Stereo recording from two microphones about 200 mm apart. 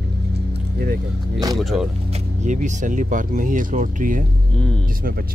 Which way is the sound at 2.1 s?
35° right (ahead or behind).